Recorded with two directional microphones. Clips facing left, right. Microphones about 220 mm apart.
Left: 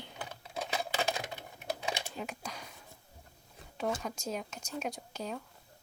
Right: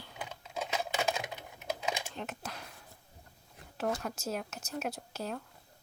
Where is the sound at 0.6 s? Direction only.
35° left (ahead or behind).